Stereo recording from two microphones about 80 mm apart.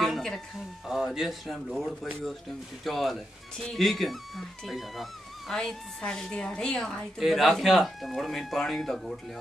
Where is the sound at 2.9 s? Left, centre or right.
Centre.